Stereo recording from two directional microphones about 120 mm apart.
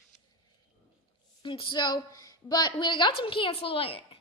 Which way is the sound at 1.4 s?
40° left (ahead or behind).